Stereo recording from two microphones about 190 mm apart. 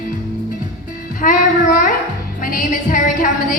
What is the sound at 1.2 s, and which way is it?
A woman's voice, 45° left (ahead or behind).